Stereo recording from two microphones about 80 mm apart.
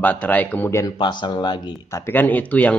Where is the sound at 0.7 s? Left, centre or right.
Left.